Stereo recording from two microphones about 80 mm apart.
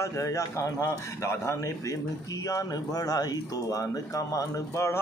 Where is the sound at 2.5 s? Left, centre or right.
Left.